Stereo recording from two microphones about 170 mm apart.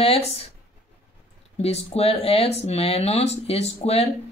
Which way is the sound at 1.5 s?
40° left (ahead or behind).